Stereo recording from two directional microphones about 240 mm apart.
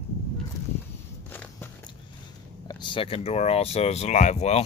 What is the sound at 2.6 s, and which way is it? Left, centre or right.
Speech, centre.